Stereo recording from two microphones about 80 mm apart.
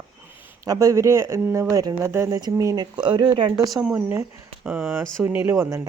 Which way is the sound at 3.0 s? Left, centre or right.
Right.